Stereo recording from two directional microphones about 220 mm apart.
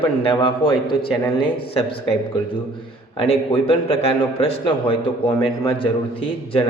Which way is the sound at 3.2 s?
25° left (ahead or behind).